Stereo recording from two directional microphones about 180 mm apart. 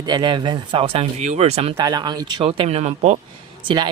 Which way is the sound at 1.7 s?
20° right (ahead or behind).